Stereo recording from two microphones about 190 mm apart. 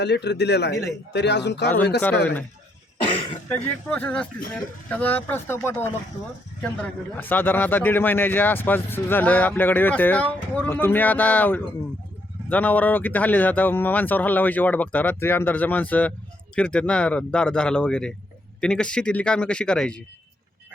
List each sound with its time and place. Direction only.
0.0 s speech: 60° left (ahead or behind)
3.8 s a man's voice: 10° left (ahead or behind)